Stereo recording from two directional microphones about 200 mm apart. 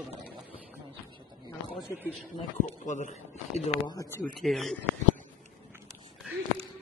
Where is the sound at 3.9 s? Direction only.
15° left (ahead or behind).